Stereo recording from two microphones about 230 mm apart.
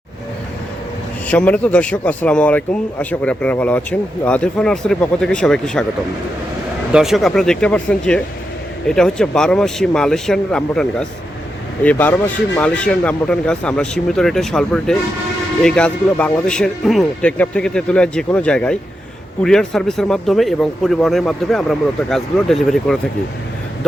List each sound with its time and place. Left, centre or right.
1.3 s a man's voice: centre
6.9 s a man's voice: centre